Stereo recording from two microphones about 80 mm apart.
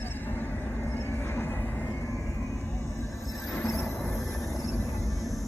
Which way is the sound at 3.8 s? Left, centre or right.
Left.